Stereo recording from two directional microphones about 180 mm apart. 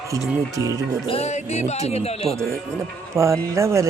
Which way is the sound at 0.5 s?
20° right (ahead or behind).